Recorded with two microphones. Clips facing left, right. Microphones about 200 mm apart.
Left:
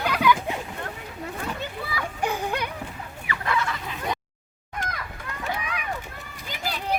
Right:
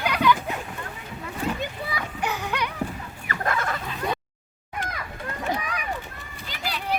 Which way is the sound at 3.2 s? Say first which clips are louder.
Even; 45° right (ahead or behind).